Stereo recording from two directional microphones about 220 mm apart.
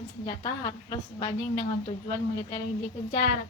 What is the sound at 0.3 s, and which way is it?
A woman's voice, 20° left (ahead or behind).